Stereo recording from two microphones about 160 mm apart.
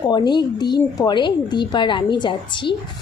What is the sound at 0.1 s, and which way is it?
A woman's voice, 25° left (ahead or behind).